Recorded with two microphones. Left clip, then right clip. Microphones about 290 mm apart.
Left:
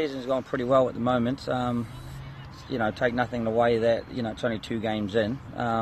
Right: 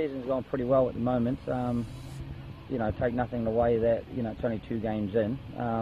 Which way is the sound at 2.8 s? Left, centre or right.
Left.